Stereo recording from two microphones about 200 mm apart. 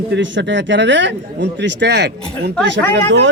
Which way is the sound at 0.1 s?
65° right (ahead or behind).